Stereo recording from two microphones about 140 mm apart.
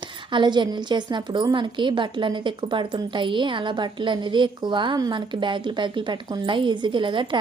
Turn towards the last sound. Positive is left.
turn(degrees=-35)  # may be behind; listen again after turning